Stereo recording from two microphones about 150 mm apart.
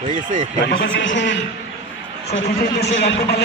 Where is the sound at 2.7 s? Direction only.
90° left.